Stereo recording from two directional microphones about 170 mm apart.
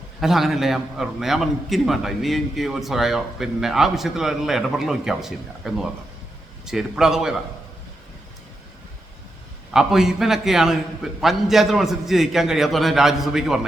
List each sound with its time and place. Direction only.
0.2 s a man's voice: centre (ahead or behind)
9.7 s a man's voice: 5° right (ahead or behind)